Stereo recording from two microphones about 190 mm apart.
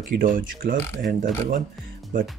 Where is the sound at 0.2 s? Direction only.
45° right (ahead or behind).